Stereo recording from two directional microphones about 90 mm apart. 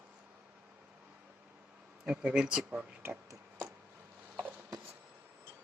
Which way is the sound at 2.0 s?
10° right (ahead or behind).